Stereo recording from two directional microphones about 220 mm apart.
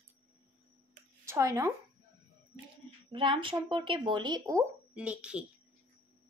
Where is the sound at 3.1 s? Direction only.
25° right (ahead or behind).